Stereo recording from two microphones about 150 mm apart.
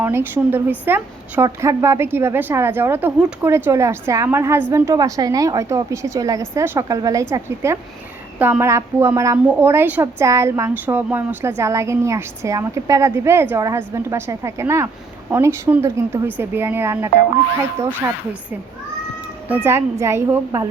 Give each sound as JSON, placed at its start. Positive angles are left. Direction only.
{"t": 0.0, "sound": "a woman's voice", "side_deg": -15}
{"t": 19.5, "sound": "a woman's voice", "side_deg": -15}